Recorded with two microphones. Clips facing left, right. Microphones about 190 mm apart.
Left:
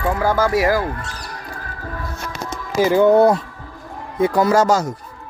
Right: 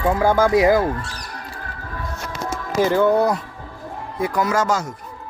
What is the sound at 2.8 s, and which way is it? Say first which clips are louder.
Speech: left 3 dB; 15° left (ahead or behind).